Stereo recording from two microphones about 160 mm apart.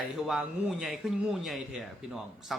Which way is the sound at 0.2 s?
Centre (ahead or behind).